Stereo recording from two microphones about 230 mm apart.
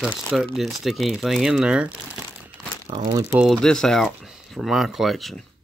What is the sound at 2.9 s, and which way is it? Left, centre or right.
Speech, right.